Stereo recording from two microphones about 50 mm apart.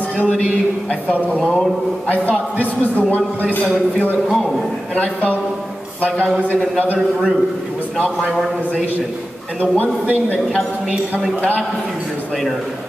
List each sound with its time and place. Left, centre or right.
1.4 s a man's voice: centre
2.0 s a man's voice: left
4.3 s a man's voice: centre
4.9 s a man's voice: left
9.6 s a man's voice: left